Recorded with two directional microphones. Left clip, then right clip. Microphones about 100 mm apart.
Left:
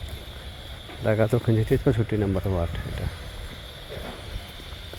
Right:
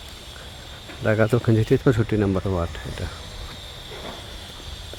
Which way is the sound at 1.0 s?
50° right (ahead or behind).